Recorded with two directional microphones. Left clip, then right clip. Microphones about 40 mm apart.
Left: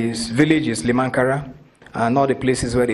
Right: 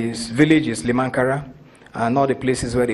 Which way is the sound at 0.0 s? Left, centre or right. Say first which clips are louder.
Even; right.